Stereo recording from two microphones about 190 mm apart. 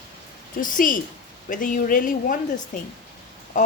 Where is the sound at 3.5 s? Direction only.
40° left (ahead or behind).